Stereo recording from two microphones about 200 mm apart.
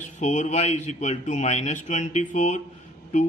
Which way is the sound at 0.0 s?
35° left (ahead or behind).